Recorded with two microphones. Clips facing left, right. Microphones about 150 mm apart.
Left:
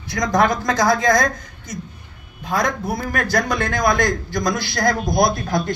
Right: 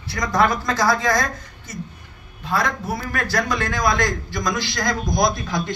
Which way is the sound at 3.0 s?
65° left (ahead or behind).